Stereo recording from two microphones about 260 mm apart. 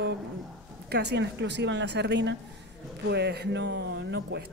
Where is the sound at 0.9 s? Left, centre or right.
Right.